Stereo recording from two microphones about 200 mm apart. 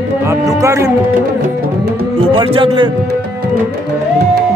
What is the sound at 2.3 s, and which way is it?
Speech, 25° right (ahead or behind).